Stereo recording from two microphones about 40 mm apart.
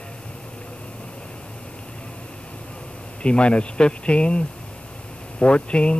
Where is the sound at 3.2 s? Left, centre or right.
Left.